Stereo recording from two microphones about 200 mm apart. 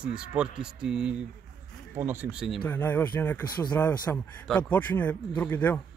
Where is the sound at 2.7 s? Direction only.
10° left (ahead or behind).